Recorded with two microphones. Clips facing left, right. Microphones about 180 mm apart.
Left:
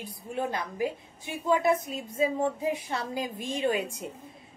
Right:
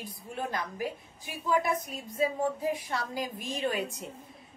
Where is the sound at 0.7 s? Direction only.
25° left (ahead or behind).